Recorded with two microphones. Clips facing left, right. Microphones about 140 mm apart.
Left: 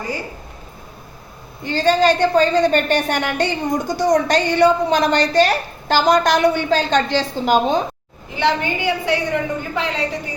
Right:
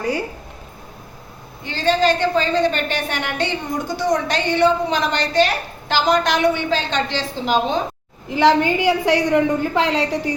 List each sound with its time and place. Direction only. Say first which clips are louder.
1.6 s a woman's voice: left 2 dB; 40° left (ahead or behind)
8.3 s a woman's voice: right 4 dB; 90° right